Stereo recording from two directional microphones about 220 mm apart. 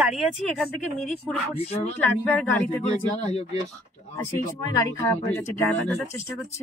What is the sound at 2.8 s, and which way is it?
Speech, 30° left (ahead or behind).